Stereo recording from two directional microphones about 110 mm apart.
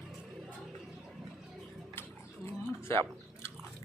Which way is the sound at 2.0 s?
20° left (ahead or behind).